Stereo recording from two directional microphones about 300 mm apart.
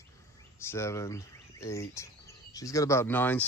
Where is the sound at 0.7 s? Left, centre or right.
Centre.